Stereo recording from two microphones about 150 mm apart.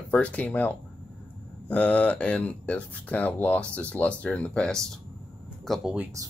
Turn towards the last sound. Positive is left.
turn(degrees=0)  # may be behind; listen again after turning